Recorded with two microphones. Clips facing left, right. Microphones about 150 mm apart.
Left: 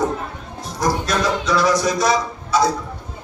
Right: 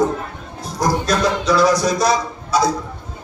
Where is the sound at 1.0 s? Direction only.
35° right (ahead or behind).